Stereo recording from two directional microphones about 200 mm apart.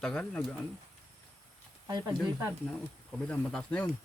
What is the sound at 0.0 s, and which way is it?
Speech, 5° left (ahead or behind).